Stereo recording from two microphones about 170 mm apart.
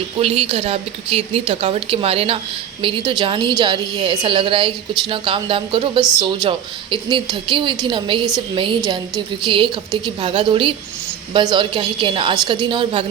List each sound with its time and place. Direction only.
0.2 s a woman's voice: 35° right (ahead or behind)